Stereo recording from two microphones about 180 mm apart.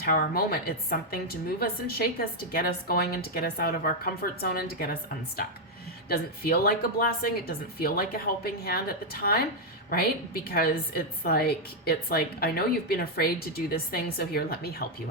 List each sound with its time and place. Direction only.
0.0 s a woman's voice: 55° left (ahead or behind)
6.1 s a woman's voice: 60° left (ahead or behind)
10.5 s a woman's voice: 55° left (ahead or behind)